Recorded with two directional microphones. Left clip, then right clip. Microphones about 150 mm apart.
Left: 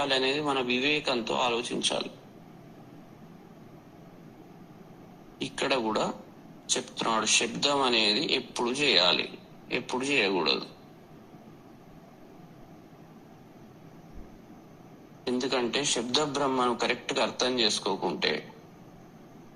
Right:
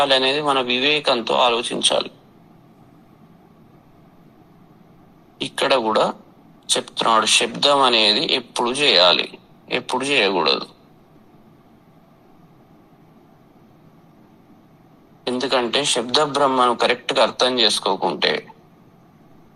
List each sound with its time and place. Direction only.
0.0 s speech: 45° right (ahead or behind)
5.4 s speech: 45° right (ahead or behind)
15.2 s speech: 40° right (ahead or behind)